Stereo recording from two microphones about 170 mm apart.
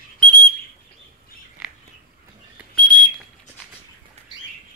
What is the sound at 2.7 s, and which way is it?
Whistle, 5° left (ahead or behind).